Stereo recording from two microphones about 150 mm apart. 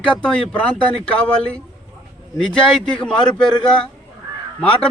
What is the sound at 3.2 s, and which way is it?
Speech, 30° left (ahead or behind).